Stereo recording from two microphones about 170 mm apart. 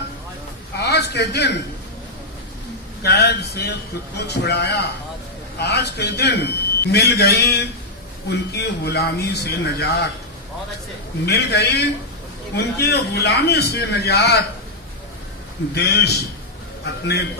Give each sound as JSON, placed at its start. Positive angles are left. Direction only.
{"t": 0.8, "sound": "a sound", "side_deg": 75}
{"t": 3.0, "sound": "a man's voice", "side_deg": 70}
{"t": 11.3, "sound": "a man's voice", "side_deg": 75}
{"t": 15.7, "sound": "a man's voice", "side_deg": 70}